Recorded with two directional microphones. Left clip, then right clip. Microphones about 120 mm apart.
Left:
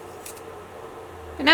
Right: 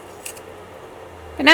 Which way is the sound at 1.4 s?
25° right (ahead or behind).